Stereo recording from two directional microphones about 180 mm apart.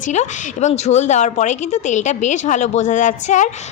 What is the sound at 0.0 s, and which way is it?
A woman's voice, 40° left (ahead or behind).